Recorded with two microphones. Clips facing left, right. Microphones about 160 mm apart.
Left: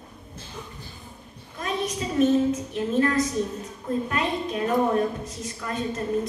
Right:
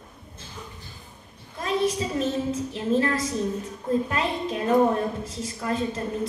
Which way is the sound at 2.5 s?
30° right (ahead or behind).